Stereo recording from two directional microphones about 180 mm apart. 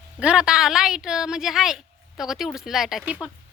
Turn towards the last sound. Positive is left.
turn(degrees=-5)  # may be behind; listen again after turning